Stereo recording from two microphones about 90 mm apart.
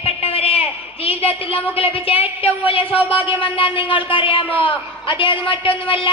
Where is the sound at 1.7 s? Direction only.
90° left.